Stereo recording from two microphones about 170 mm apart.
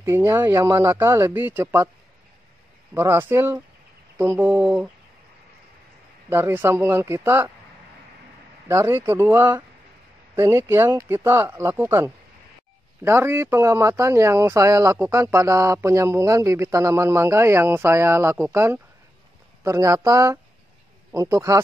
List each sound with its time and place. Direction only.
0.0 s speech: 15° right (ahead or behind)
2.9 s speech: 15° right (ahead or behind)
6.3 s speech: 15° right (ahead or behind)
8.6 s speech: 15° right (ahead or behind)